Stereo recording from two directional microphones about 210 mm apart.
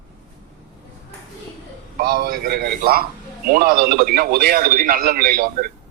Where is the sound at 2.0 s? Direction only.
45° right (ahead or behind).